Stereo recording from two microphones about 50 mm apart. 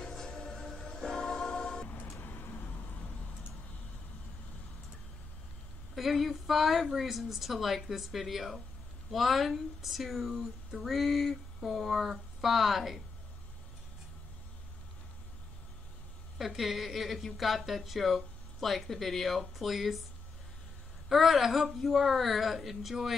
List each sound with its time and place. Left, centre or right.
0.0 s music: centre
2.1 s vehicle: left
5.9 s speech: centre
16.3 s speech: centre
21.1 s speech: centre